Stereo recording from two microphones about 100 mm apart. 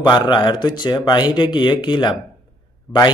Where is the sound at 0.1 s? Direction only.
45° left (ahead or behind).